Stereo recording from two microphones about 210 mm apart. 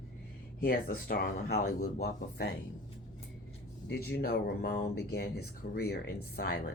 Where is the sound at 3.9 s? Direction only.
45° left (ahead or behind).